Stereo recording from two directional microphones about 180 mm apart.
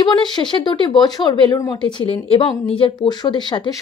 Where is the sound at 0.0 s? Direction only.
25° left (ahead or behind).